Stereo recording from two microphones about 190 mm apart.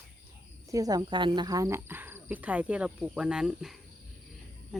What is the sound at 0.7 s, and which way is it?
Speech, 20° right (ahead or behind).